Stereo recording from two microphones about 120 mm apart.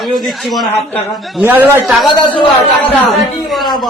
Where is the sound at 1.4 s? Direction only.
15° right (ahead or behind).